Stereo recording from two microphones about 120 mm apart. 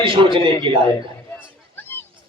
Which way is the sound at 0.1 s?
45° right (ahead or behind).